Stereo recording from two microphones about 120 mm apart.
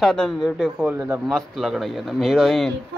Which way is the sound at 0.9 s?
20° right (ahead or behind).